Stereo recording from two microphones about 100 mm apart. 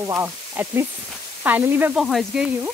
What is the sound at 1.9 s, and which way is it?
Speech, 5° right (ahead or behind).